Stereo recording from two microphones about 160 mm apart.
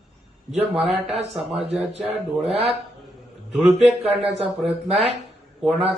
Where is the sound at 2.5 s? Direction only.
40° right (ahead or behind).